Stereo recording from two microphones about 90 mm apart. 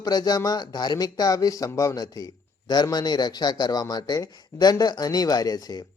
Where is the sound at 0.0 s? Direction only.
45° left (ahead or behind).